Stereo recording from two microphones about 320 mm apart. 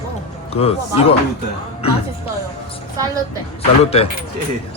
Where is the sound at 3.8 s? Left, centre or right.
Centre.